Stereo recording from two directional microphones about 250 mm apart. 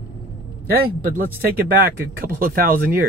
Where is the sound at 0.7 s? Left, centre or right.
Right.